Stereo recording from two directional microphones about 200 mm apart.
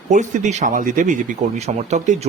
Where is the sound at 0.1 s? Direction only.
35° right (ahead or behind).